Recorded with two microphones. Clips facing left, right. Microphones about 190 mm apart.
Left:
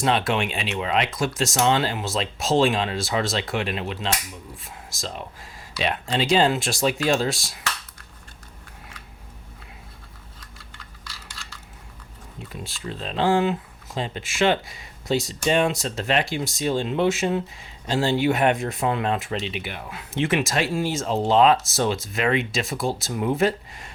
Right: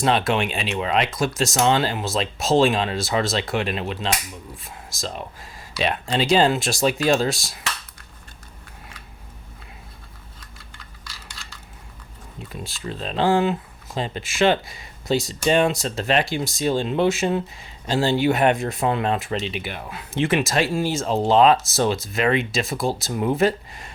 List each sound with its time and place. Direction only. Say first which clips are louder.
0.0 s speech: right 2 dB; 40° right (ahead or behind)
11.4 s coin: even; 15° right (ahead or behind)
12.6 s speech: right 2 dB; 40° right (ahead or behind)